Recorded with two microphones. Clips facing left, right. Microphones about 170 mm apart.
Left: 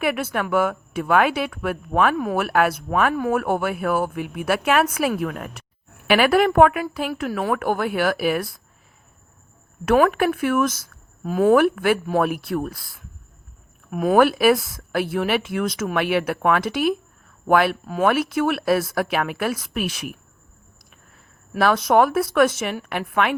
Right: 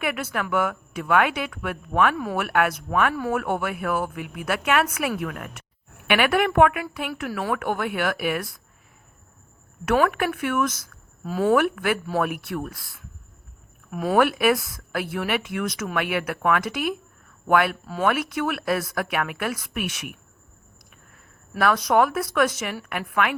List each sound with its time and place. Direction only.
0.0 s a woman's voice: 30° left (ahead or behind)
9.8 s a woman's voice: 30° left (ahead or behind)
13.9 s speech: 20° left (ahead or behind)
14.2 s a woman's voice: 30° left (ahead or behind)
21.6 s speech: 25° left (ahead or behind)